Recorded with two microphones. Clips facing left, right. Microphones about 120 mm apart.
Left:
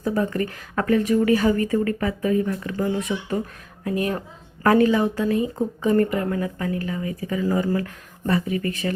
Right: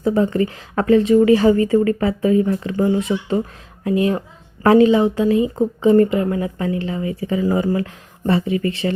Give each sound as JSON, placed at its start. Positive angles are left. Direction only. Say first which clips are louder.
{"t": 0.0, "sound": "speech", "louder": "right 6 dB", "side_deg": -25}
{"t": 8.8, "sound": "speech", "louder": "right 5 dB", "side_deg": -35}